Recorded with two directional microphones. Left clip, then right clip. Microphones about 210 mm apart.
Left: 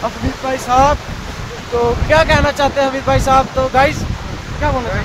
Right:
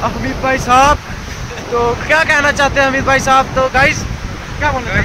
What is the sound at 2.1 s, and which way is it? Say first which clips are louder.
Speech: right 1 dB; centre (ahead or behind).